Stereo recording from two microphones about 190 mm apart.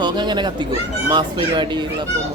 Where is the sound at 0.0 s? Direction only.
25° right (ahead or behind).